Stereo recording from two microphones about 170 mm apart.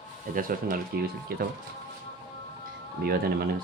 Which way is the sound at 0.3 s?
55° right (ahead or behind).